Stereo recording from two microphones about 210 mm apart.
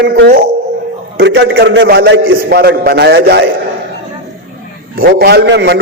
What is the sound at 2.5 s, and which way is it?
A man's voice, 45° right (ahead or behind).